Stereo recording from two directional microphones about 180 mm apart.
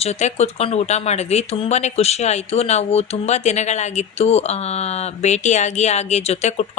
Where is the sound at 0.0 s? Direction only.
40° left (ahead or behind).